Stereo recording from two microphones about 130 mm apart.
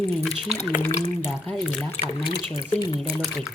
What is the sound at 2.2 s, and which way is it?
Speech, 35° left (ahead or behind).